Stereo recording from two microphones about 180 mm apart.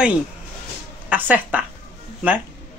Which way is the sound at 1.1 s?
10° right (ahead or behind).